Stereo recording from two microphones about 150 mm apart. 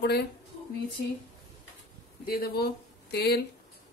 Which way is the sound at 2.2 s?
90° left.